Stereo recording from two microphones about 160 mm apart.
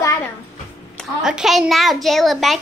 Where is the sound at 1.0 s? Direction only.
5° right (ahead or behind).